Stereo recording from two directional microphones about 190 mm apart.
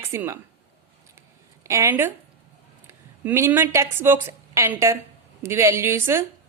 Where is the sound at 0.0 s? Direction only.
15° right (ahead or behind).